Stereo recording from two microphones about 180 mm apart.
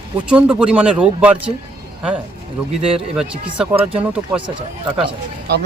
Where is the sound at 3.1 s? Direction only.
5° right (ahead or behind).